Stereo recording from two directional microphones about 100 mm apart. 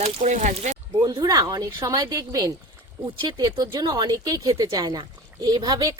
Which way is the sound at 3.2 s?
45° right (ahead or behind).